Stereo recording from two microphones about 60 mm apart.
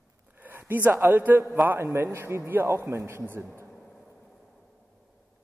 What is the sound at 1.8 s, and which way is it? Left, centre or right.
A man's voice, right.